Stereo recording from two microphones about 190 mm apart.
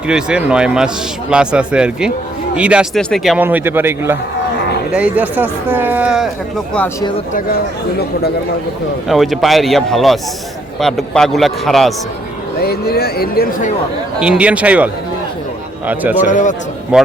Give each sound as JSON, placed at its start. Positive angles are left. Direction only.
{"t": 0.1, "sound": "a man's voice", "side_deg": -5}
{"t": 3.3, "sound": "speech", "side_deg": -10}
{"t": 9.0, "sound": "a man's voice", "side_deg": 0}
{"t": 12.6, "sound": "speech", "side_deg": 55}
{"t": 14.2, "sound": "speech", "side_deg": -5}
{"t": 16.1, "sound": "a man's voice", "side_deg": 40}
{"t": 16.9, "sound": "a man's voice", "side_deg": -5}